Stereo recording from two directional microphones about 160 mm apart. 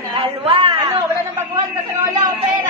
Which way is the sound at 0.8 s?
20° right (ahead or behind).